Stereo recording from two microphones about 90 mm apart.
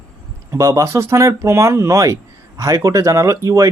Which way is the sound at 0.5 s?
35° right (ahead or behind).